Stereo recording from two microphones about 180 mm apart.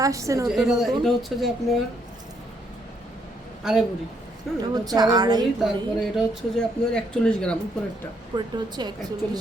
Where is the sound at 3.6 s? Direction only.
5° right (ahead or behind).